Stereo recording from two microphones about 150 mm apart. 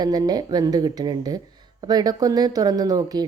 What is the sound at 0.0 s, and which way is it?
Speech, 25° right (ahead or behind).